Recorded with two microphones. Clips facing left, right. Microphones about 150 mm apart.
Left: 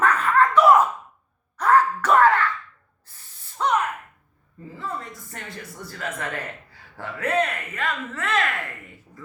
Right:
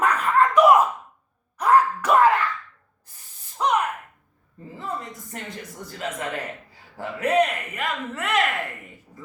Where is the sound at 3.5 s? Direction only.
15° right (ahead or behind).